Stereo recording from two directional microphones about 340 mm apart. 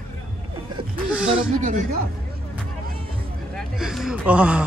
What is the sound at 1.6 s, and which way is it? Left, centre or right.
Speech, right.